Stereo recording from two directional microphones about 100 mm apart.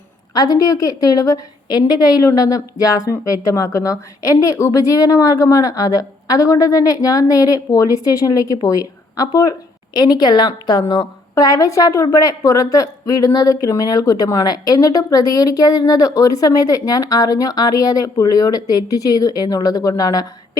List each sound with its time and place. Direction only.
0.3 s speech: 35° left (ahead or behind)